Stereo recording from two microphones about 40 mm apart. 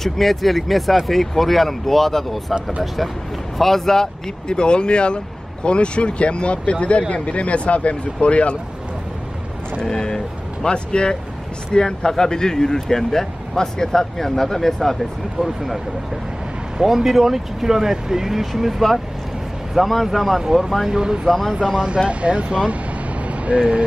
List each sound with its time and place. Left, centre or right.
0.0 s speech: centre
3.5 s speech: centre; by 8.5 s left
9.8 s speech: centre
20.9 s speech: centre
21.3 s speech: centre
21.5 s speech: centre